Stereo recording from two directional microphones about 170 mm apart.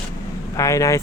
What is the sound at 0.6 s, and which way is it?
Speech, 20° left (ahead or behind).